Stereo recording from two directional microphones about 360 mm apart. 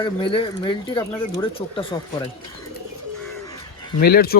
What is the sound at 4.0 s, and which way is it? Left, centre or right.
Speech, left.